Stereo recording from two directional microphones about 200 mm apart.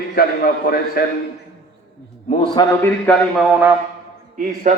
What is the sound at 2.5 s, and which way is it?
A man's voice, 15° left (ahead or behind).